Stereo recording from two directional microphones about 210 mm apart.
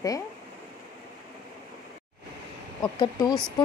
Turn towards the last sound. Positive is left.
turn(degrees=15)  # may be behind; listen again after turning